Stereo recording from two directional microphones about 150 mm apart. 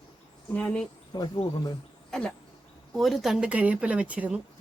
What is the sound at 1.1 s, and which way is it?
Speech, 30° left (ahead or behind).